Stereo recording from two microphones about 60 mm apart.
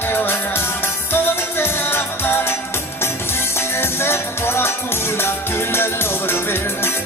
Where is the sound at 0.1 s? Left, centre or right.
Left.